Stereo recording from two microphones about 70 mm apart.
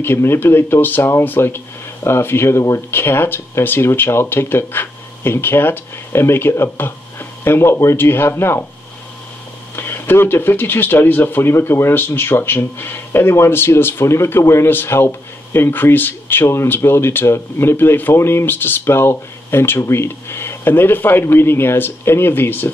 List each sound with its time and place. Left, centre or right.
0.0 s speech: left
2.9 s speech: left
9.8 s speech: left